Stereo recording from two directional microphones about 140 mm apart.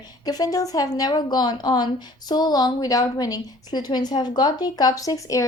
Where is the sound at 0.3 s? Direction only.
25° left (ahead or behind).